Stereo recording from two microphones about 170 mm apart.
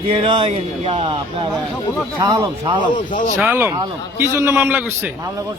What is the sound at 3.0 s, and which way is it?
Speech, 50° left (ahead or behind).